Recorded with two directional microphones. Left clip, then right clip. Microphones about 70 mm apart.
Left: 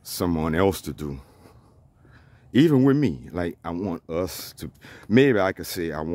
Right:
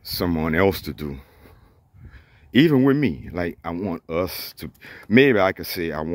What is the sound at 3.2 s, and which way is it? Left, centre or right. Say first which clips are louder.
Speech: right 2 dB; left.